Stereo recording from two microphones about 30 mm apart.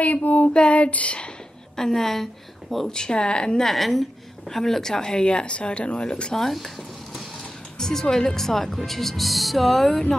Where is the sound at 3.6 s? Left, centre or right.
Centre; by 6.3 s left.